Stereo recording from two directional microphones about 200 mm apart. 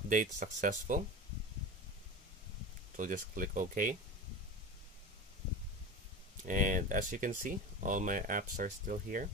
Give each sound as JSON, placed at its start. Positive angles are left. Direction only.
{"t": 0.1, "sound": "speech", "side_deg": -40}
{"t": 3.0, "sound": "speech", "side_deg": -40}
{"t": 6.4, "sound": "speech", "side_deg": -40}